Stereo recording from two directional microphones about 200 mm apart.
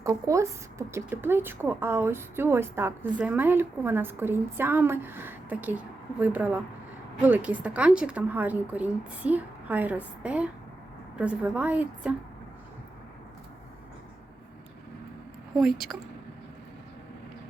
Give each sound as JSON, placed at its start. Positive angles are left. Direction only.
{"t": 0.0, "sound": "speech", "side_deg": -15}
{"t": 15.5, "sound": "speech", "side_deg": 0}